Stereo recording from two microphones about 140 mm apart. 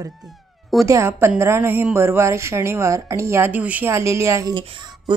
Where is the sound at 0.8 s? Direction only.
20° right (ahead or behind).